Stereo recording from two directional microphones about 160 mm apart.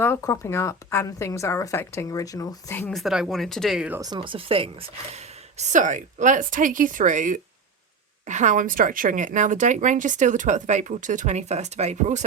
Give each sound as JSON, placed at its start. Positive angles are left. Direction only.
{"t": 0.0, "sound": "a woman's voice", "side_deg": 15}
{"t": 2.9, "sound": "speech", "side_deg": 0}
{"t": 4.0, "sound": "speech", "side_deg": -30}
{"t": 5.5, "sound": "a woman's voice", "side_deg": -50}